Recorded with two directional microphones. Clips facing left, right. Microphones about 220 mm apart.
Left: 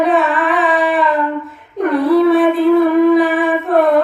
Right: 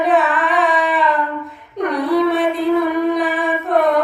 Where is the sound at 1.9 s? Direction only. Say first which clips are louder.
Left 6 dB; centre (ahead or behind).